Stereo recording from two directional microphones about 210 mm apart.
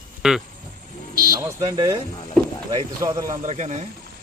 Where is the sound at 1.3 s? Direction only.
20° right (ahead or behind).